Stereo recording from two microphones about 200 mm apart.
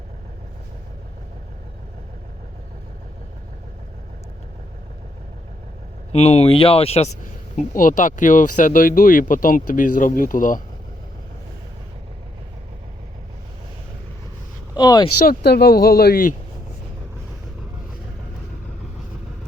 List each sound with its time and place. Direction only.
6.1 s speech: 30° left (ahead or behind)
7.5 s speech: 40° left (ahead or behind)
14.8 s speech: 20° left (ahead or behind)
15.3 s speech: 50° left (ahead or behind)